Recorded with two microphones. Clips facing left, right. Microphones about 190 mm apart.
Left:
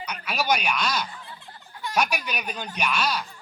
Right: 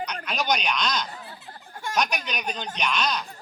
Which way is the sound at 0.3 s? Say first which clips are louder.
Left 2 dB; 5° left (ahead or behind).